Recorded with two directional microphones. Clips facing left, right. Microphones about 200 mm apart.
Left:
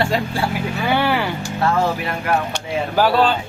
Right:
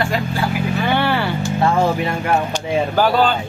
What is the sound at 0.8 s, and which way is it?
Speech, 10° left (ahead or behind).